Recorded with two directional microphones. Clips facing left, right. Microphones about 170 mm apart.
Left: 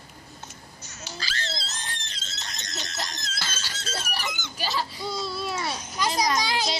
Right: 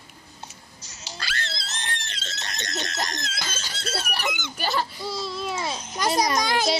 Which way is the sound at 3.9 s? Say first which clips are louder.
Right 4 dB; 65° right (ahead or behind).